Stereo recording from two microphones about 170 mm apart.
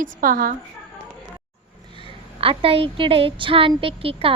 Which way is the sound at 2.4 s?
35° right (ahead or behind).